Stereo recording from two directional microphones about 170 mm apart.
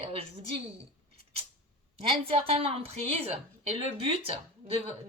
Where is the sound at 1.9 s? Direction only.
35° right (ahead or behind).